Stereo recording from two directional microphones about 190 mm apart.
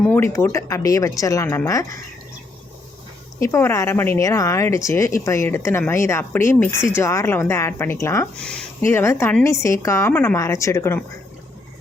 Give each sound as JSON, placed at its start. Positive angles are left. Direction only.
{"t": 0.0, "sound": "speech", "side_deg": 10}
{"t": 3.4, "sound": "speech", "side_deg": 15}